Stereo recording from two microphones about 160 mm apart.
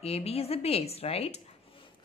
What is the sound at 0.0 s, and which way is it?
A woman's voice, 40° left (ahead or behind).